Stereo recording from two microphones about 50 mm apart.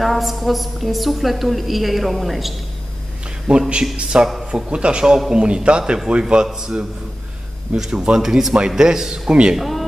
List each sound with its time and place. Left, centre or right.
0.0 s a woman's voice: centre
3.4 s a man's voice: centre
9.6 s speech: centre